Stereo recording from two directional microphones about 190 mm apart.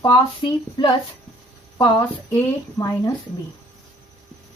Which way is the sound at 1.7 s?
20° left (ahead or behind).